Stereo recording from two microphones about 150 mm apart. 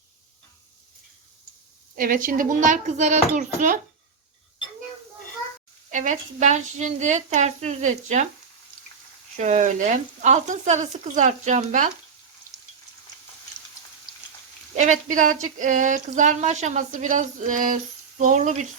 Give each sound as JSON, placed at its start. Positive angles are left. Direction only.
{"t": 2.0, "sound": "speech", "side_deg": -65}
{"t": 5.9, "sound": "speech", "side_deg": -55}
{"t": 9.4, "sound": "speech", "side_deg": -55}
{"t": 14.8, "sound": "speech", "side_deg": -55}